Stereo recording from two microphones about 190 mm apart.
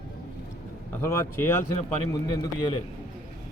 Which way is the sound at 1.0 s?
15° left (ahead or behind).